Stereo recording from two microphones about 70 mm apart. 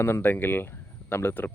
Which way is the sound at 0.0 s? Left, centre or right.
Left.